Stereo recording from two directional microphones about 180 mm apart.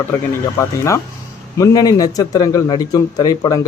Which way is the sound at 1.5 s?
20° left (ahead or behind).